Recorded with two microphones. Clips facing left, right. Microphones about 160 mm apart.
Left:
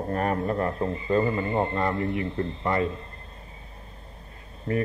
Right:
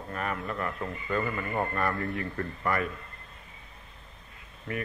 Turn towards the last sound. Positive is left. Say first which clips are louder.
# left 8 dB
turn(degrees=35)  # may be behind; listen again after turning